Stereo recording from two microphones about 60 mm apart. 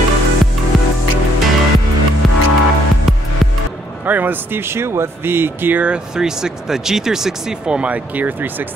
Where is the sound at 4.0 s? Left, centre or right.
Right.